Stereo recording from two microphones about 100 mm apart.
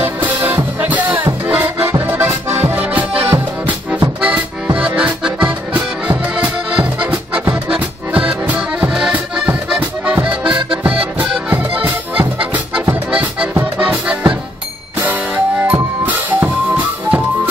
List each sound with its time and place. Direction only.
0.0 s music: 20° right (ahead or behind)
1.5 s accordion: 20° right (ahead or behind)
3.1 s music: 70° right (ahead or behind)
3.6 s music: 15° right (ahead or behind)
4.7 s accordion: 10° right (ahead or behind)
7.0 s music: 10° right (ahead or behind)
7.7 s accordion: 10° right (ahead or behind)
11.8 s music: 15° right (ahead or behind)
13.1 s accordion: 15° right (ahead or behind)
15.6 s music: 15° right (ahead or behind)